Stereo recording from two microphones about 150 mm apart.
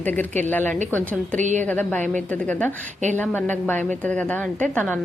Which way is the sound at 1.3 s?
55° right (ahead or behind).